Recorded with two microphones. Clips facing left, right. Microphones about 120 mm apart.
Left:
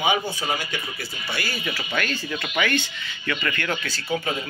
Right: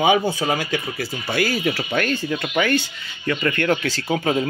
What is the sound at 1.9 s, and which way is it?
Speech, 45° right (ahead or behind).